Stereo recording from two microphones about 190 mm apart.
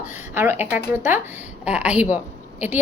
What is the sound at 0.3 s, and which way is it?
A woman's voice, 10° right (ahead or behind).